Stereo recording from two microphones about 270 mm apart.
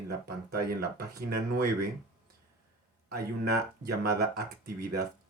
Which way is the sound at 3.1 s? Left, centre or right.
Right.